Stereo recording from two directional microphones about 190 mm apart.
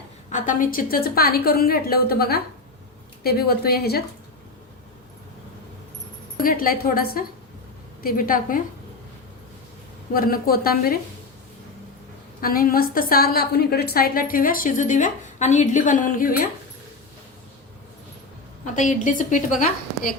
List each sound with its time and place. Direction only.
0.3 s a woman's voice: 40° left (ahead or behind)
6.3 s a woman's voice: 50° left (ahead or behind)
10.2 s a woman's voice: 50° left (ahead or behind)
12.4 s a woman's voice: 50° left (ahead or behind)
18.6 s a woman's voice: 40° left (ahead or behind)